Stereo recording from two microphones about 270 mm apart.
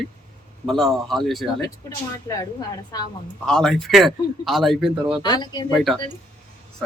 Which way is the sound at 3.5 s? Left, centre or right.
Centre.